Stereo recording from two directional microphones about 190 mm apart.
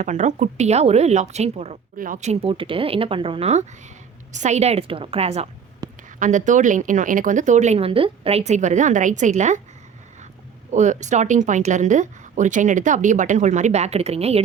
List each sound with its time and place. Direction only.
0.0 s speech: 40° right (ahead or behind)
10.7 s speech: 40° right (ahead or behind)